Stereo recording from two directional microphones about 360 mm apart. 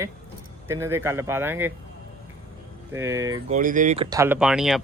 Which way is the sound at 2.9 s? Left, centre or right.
Centre.